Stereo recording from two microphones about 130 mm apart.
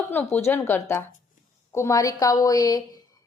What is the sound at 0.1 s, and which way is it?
A woman's voice, 15° left (ahead or behind).